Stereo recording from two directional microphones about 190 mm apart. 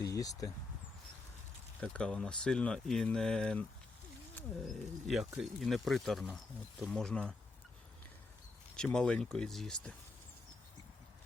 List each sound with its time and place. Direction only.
0.0 s speech: 20° left (ahead or behind)
1.8 s speech: 5° left (ahead or behind)
8.7 s speech: 5° left (ahead or behind)